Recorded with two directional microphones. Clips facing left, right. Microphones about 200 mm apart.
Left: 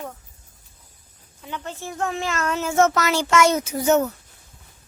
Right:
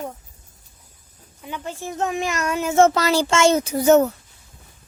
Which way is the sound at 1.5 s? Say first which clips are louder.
Right 2 dB; 10° right (ahead or behind).